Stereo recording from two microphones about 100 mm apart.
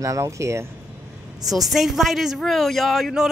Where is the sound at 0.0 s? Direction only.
30° right (ahead or behind).